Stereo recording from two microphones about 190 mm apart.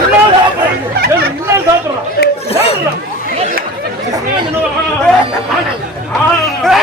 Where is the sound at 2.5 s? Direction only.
30° left (ahead or behind).